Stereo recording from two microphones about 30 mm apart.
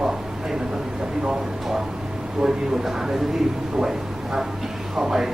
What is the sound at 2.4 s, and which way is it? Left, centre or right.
Speech, centre.